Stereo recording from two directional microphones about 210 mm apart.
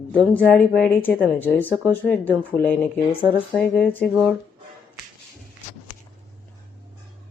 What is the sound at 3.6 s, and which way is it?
Speech, 5° left (ahead or behind).